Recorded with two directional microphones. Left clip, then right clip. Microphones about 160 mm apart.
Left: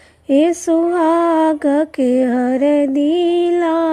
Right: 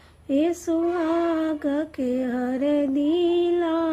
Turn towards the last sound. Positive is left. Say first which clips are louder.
# left 7 dB
turn(degrees=40)  # may be behind; listen again after turning